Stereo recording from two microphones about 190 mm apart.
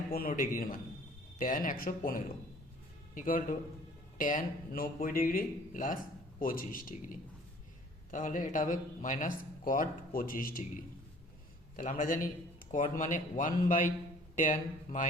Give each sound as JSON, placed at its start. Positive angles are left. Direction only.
{"t": 0.1, "sound": "speech", "side_deg": 50}
{"t": 11.8, "sound": "speech", "side_deg": 45}